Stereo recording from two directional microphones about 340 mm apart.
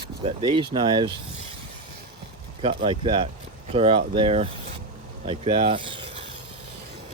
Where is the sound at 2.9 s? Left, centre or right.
Centre.